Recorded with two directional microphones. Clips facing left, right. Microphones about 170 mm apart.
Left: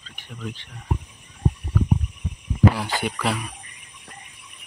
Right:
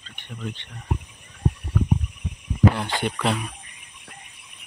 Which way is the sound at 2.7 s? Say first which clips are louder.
Even; 5° left (ahead or behind).